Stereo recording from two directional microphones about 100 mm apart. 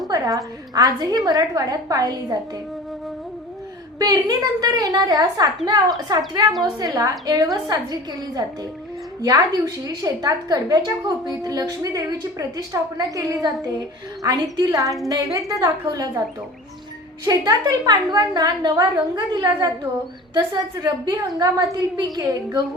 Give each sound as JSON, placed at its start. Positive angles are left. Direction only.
{"t": 0.1, "sound": "a woman's voice", "side_deg": -35}
{"t": 3.9, "sound": "a woman's voice", "side_deg": -40}
{"t": 9.2, "sound": "a woman's voice", "side_deg": -40}
{"t": 14.3, "sound": "a woman's voice", "side_deg": -35}
{"t": 17.2, "sound": "a woman's voice", "side_deg": -40}